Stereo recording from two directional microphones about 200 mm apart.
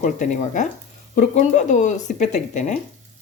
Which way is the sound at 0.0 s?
40° left (ahead or behind).